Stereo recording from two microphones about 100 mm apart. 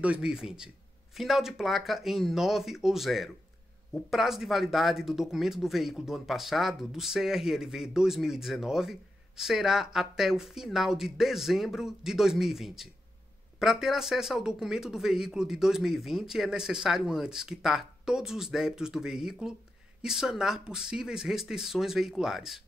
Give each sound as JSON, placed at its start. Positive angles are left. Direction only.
{"t": 0.0, "sound": "speech", "side_deg": -10}